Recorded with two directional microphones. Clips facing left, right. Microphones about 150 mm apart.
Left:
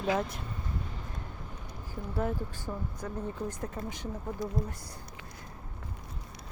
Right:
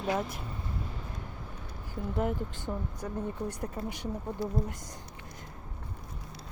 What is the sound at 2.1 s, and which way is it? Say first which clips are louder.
Speech: right 1 dB; 20° right (ahead or behind).